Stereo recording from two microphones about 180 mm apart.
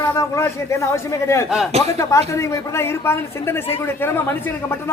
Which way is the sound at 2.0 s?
15° left (ahead or behind).